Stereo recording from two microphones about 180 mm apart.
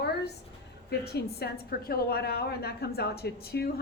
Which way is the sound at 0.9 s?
65° left (ahead or behind).